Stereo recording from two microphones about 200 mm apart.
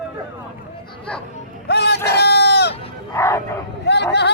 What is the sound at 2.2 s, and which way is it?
Sheep, 55° left (ahead or behind).